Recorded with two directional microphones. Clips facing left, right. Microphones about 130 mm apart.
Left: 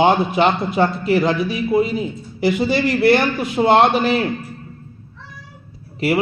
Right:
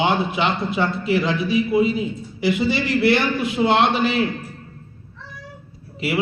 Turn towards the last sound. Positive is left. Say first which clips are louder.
# left 4 dB
turn(degrees=45)  # may be behind; listen again after turning